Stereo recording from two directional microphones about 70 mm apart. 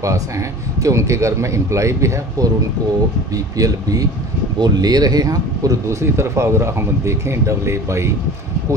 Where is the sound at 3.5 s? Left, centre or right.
Right.